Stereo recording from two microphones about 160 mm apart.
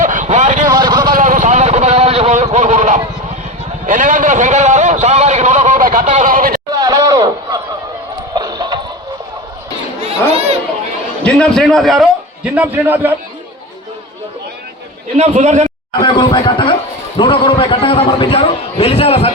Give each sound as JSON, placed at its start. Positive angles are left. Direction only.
{"t": 0.0, "sound": "vehicle", "side_deg": -55}
{"t": 0.7, "sound": "vehicle", "side_deg": -25}
{"t": 1.1, "sound": "a sound", "side_deg": -55}
{"t": 6.7, "sound": "a sound", "side_deg": -25}
{"t": 8.4, "sound": "music", "side_deg": -25}
{"t": 11.3, "sound": "a man's voice", "side_deg": 5}
{"t": 15.2, "sound": "a man's voice", "side_deg": -50}
{"t": 16.0, "sound": "a man's voice", "side_deg": 30}